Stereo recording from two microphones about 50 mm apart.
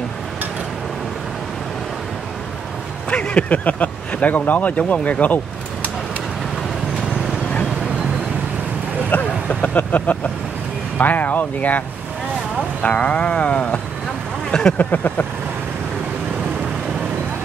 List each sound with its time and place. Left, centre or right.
3.1 s speech: left
9.1 s vehicle: left
11.0 s speech: left; by 14.8 s centre
14.8 s speech: left